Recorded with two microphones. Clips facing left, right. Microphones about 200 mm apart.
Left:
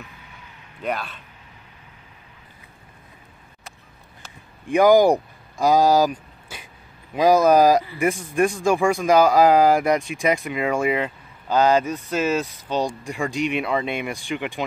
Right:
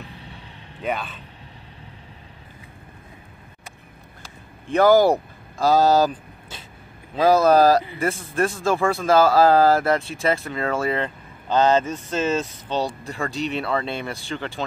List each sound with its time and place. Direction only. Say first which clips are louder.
0.0 s vehicle: right 4 dB; 30° right (ahead or behind)
0.8 s speech: even; centre (ahead or behind)
4.6 s speech: left 1 dB; 15° left (ahead or behind)